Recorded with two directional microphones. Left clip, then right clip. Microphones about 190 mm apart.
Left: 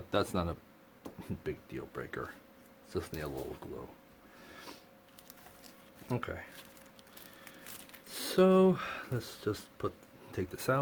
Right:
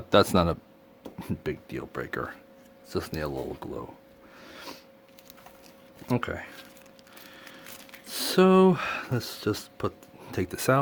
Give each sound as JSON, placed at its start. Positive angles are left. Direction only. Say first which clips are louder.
{"t": 0.1, "sound": "speech", "louder": "right 12 dB", "side_deg": -50}
{"t": 4.5, "sound": "a sound", "louder": "right 7 dB", "side_deg": -50}
{"t": 6.1, "sound": "speech", "louder": "right 8 dB", "side_deg": -55}
{"t": 8.0, "sound": "speech", "louder": "right 5 dB", "side_deg": -50}